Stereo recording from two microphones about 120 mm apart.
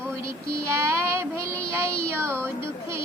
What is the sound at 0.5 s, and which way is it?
Child singing, 25° right (ahead or behind).